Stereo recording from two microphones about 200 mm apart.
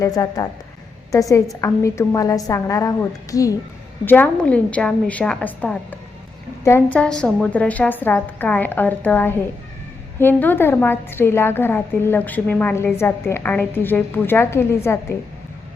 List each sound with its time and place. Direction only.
0.0 s a woman's voice: 20° left (ahead or behind)